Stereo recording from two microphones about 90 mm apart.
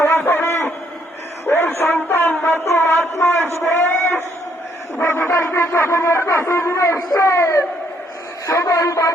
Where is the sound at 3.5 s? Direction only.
25° left (ahead or behind).